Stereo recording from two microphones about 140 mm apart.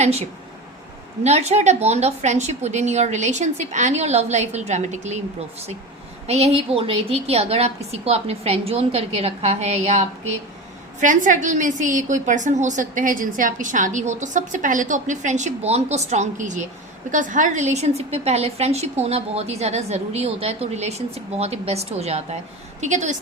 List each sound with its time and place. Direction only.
0.0 s a woman's voice: 50° right (ahead or behind)
11.0 s a woman's voice: 65° right (ahead or behind); by 22.4 s 50° right (ahead or behind)
22.8 s a woman's voice: 60° right (ahead or behind)